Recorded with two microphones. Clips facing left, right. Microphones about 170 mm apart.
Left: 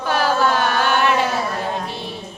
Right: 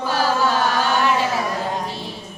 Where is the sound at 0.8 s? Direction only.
65° left (ahead or behind).